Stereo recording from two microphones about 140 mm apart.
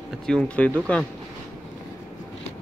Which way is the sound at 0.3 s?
10° left (ahead or behind).